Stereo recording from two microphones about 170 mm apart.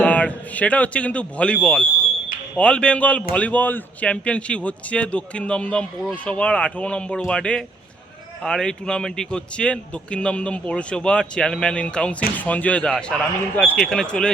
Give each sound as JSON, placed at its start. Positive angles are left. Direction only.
{"t": 0.0, "sound": "a man's voice", "side_deg": 10}